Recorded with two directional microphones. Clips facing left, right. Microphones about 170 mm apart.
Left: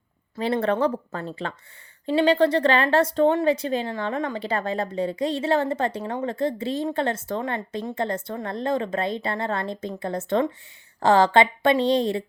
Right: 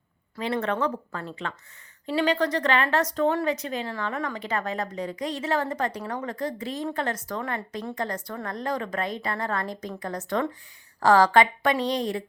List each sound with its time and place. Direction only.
0.3 s speech: 35° left (ahead or behind)